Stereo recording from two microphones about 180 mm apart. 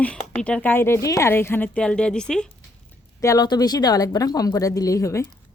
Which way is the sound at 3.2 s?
20° left (ahead or behind).